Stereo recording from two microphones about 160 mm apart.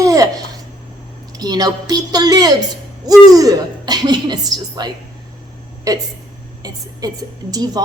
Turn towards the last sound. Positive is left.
turn(degrees=-25)  # may be behind; listen again after turning